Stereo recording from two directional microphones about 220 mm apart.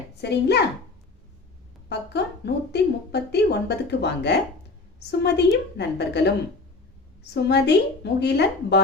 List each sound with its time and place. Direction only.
0.2 s a woman's voice: 50° left (ahead or behind)
1.9 s a woman's voice: 50° left (ahead or behind)
7.3 s a woman's voice: 50° left (ahead or behind)